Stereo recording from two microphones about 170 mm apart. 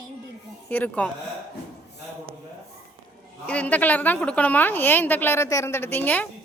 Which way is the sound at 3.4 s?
10° left (ahead or behind).